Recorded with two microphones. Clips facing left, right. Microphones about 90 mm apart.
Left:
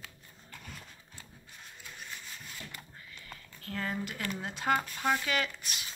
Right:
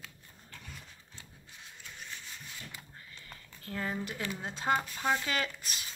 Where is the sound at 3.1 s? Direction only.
30° right (ahead or behind).